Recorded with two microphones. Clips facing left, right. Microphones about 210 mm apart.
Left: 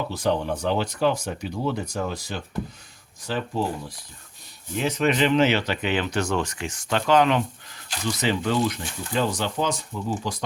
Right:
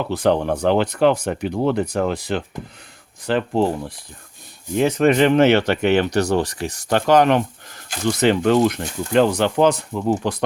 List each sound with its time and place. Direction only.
0.1 s speech: 60° right (ahead or behind)
4.8 s speech: 50° right (ahead or behind); by 6.8 s 35° right (ahead or behind)
6.9 s speech: 45° right (ahead or behind)